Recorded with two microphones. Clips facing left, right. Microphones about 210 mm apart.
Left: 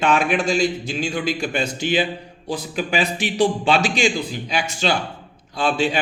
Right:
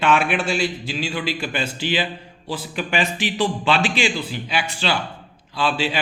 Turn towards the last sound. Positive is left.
turn(degrees=45)  # may be behind; listen again after turning